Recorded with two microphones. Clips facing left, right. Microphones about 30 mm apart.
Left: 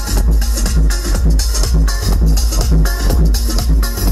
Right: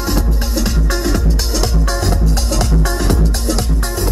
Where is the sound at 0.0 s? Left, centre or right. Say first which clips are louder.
Right 3 dB; centre.